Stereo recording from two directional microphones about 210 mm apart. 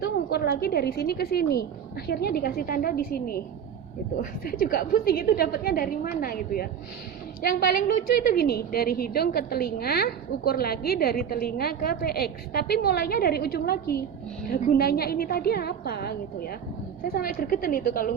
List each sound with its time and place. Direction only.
0.0 s a woman's voice: 50° left (ahead or behind)